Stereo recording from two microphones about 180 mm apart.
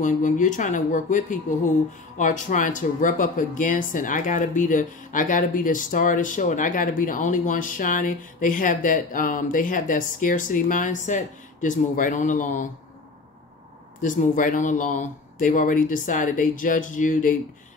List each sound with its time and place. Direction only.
0.0 s speech: 45° left (ahead or behind)
14.0 s speech: 45° left (ahead or behind)